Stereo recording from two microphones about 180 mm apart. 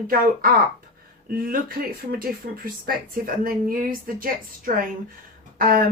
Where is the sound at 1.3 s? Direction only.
55° right (ahead or behind).